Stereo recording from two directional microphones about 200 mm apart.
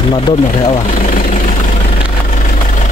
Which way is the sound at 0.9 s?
40° left (ahead or behind).